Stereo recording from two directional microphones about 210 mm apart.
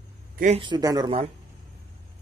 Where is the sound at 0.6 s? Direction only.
20° right (ahead or behind).